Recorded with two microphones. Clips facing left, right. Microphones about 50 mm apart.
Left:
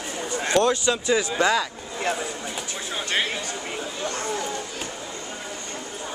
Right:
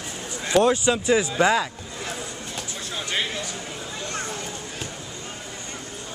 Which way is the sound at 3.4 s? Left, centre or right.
Left.